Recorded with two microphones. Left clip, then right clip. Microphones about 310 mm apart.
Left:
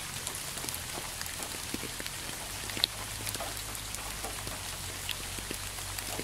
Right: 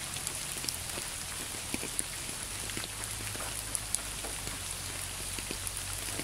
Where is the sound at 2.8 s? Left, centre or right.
Left.